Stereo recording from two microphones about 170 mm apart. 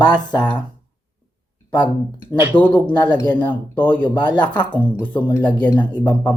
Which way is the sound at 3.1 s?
25° left (ahead or behind).